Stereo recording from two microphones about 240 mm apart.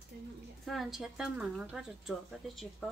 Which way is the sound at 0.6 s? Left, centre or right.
Centre.